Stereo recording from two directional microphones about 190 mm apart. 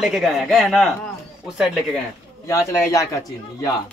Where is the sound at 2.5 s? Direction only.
15° left (ahead or behind).